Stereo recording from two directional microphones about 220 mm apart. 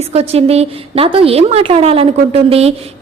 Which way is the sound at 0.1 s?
30° right (ahead or behind).